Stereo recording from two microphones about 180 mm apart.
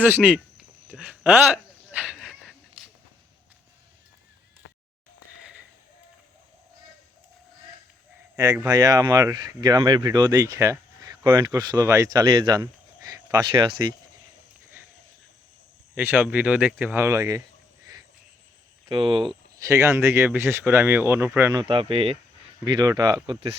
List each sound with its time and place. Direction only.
0.0 s a sound: 10° right (ahead or behind)
5.4 s a sound: 5° right (ahead or behind)
8.6 s speech: 20° right (ahead or behind)
16.0 s speech: 10° right (ahead or behind)
18.9 s speech: 25° right (ahead or behind)
19.6 s speech: 15° right (ahead or behind)
21.6 s speech: 30° right (ahead or behind)